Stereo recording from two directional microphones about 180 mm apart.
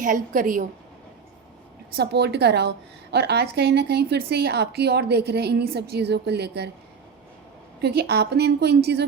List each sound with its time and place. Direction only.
0.0 s a woman's voice: 50° right (ahead or behind)
2.0 s a woman's voice: 65° right (ahead or behind)
7.8 s a woman's voice: 65° right (ahead or behind)